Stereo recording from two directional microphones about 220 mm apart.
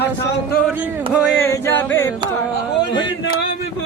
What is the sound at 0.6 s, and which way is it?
Speech, 5° right (ahead or behind).